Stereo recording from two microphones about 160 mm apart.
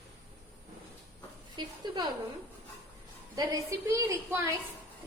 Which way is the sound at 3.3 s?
20° right (ahead or behind).